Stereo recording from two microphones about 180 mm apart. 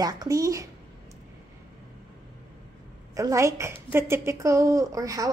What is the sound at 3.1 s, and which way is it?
A woman's voice, 15° right (ahead or behind).